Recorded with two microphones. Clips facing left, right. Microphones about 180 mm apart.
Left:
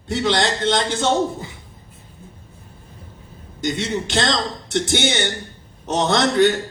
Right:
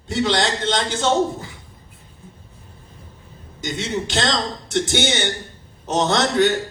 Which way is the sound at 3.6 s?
60° left (ahead or behind).